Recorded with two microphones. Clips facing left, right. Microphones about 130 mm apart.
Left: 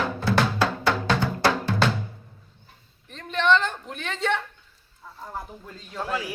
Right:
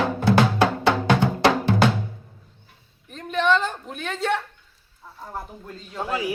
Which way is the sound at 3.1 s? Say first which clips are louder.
Right 1 dB; 5° right (ahead or behind).